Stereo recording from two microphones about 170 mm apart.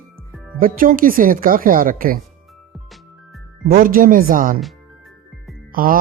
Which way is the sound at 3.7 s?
55° right (ahead or behind).